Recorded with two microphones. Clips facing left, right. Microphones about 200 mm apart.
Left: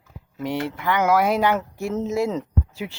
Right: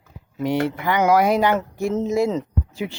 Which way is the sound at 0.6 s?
Centre (ahead or behind).